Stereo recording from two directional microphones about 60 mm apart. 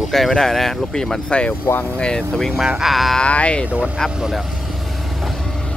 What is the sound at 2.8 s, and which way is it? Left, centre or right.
Speech, centre.